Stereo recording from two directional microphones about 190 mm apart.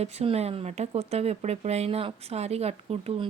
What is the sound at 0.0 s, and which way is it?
Speech, 35° right (ahead or behind).